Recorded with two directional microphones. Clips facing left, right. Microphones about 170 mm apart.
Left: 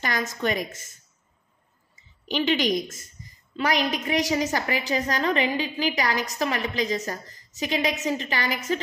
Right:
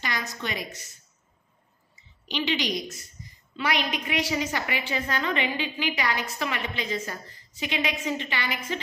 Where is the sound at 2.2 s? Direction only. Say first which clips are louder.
Left 5 dB; 50° left (ahead or behind).